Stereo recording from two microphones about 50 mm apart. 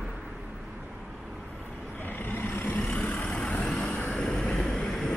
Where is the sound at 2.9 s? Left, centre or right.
Left.